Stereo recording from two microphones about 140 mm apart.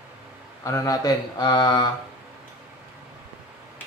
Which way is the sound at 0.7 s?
25° left (ahead or behind).